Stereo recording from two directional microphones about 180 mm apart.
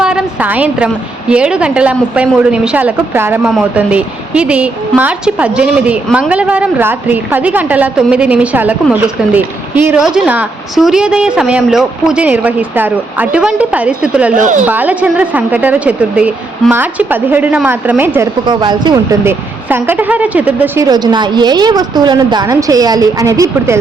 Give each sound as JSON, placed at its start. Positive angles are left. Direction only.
{"t": 0.0, "sound": "a woman's voice", "side_deg": -5}
{"t": 18.4, "sound": "speech", "side_deg": -25}
{"t": 19.2, "sound": "speech", "side_deg": -10}